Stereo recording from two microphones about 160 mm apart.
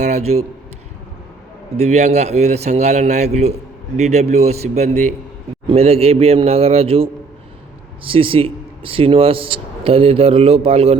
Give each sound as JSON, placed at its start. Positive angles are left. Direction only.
{"t": 0.0, "sound": "a man's voice", "side_deg": -40}
{"t": 1.7, "sound": "a man's voice", "side_deg": -45}